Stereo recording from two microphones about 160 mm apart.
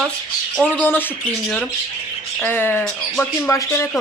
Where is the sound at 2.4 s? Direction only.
10° left (ahead or behind).